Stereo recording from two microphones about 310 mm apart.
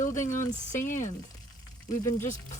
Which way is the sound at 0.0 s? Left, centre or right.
Left.